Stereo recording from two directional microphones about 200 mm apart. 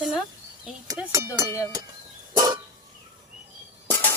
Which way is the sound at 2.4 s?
20° right (ahead or behind).